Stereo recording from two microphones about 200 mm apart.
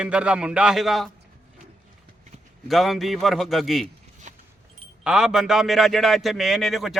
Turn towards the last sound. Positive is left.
turn(degrees=0)  # may be behind; listen again after turning